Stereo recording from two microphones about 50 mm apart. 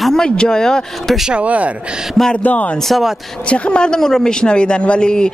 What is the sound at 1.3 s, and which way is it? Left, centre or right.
Speech, right.